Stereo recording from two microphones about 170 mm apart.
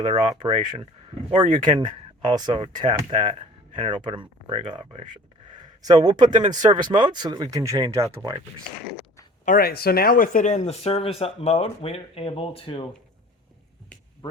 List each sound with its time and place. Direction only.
0.0 s speech: 30° right (ahead or behind)
1.4 s speech: 45° right (ahead or behind)
4.0 s speech: 25° right (ahead or behind)
6.0 s speech: 25° right (ahead or behind)
9.4 s speech: 55° left (ahead or behind); by 12.9 s 30° left (ahead or behind)